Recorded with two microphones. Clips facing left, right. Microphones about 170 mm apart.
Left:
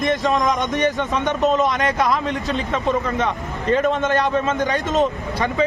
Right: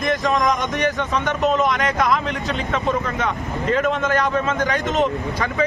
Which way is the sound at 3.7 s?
20° left (ahead or behind).